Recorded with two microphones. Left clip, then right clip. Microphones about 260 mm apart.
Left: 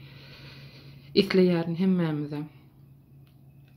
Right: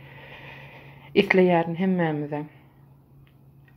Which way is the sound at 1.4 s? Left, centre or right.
Left.